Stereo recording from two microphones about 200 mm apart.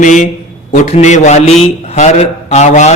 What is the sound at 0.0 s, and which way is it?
A man's voice, 40° left (ahead or behind).